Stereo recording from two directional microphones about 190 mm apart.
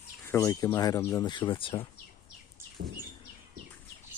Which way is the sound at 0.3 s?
15° left (ahead or behind).